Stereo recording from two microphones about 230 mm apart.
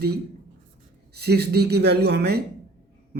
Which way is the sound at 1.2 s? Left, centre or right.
Right.